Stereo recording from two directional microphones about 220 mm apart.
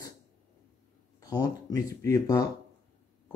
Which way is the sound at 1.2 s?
15° left (ahead or behind).